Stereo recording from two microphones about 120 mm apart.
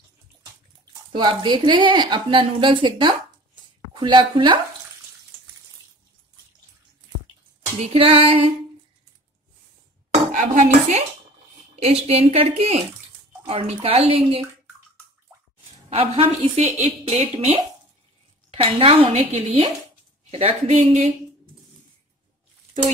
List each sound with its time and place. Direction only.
1.1 s a woman's voice: 40° right (ahead or behind)
7.8 s speech: 50° right (ahead or behind)
10.3 s dishes: 90° right; by 11.1 s 70° right (ahead or behind)
11.7 s speech: 60° right (ahead or behind)
15.9 s speech: 55° right (ahead or behind)